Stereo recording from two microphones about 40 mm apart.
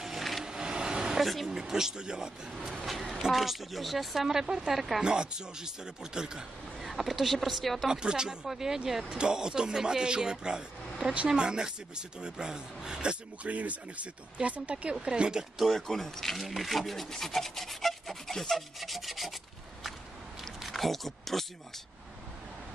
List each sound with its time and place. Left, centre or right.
0.0 s a sound: centre
0.5 s a sound: centre
1.2 s a sound: centre
1.6 s speech: centre
2.8 s speech: centre
4.7 s speech: centre
5.0 s speech: right
6.8 s speech: centre
7.9 s speech: centre
13.5 s speech: right
15.7 s speech: centre
18.8 s rub: centre
20.6 s speech: centre